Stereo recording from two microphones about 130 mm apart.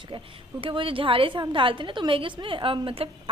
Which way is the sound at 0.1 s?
45° right (ahead or behind).